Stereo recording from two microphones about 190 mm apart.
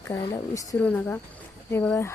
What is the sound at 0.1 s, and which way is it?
Speech, 20° left (ahead or behind).